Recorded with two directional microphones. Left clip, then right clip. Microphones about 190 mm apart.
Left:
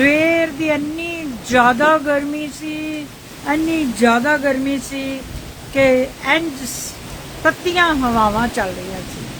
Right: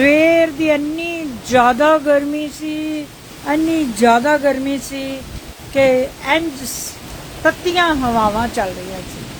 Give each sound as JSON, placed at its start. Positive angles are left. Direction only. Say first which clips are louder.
{"t": 0.0, "sound": "a sound", "louder": "right 3 dB", "side_deg": -20}
{"t": 3.4, "sound": "speech", "louder": "right 1 dB", "side_deg": -15}
{"t": 8.0, "sound": "speech", "louder": "even", "side_deg": 0}